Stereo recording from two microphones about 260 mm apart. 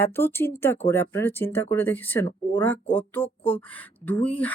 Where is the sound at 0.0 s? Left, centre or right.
Centre.